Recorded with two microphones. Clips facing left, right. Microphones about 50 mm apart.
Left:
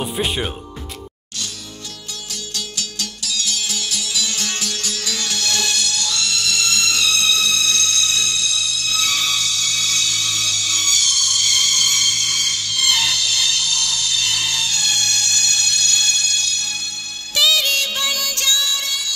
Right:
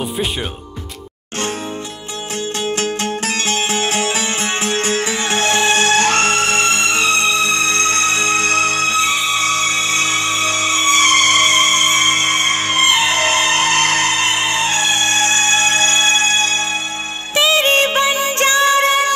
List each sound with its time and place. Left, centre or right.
2.8 s music: right